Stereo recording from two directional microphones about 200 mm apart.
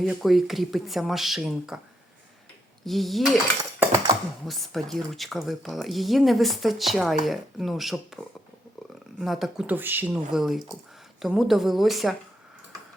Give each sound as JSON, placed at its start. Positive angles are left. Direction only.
{"t": 0.0, "sound": "speech", "side_deg": 0}
{"t": 2.8, "sound": "speech", "side_deg": 0}
{"t": 3.6, "sound": "a sound", "side_deg": -15}
{"t": 4.4, "sound": "speech", "side_deg": 0}